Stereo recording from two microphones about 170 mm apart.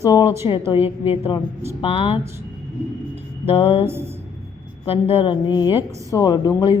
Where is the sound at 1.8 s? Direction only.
35° left (ahead or behind).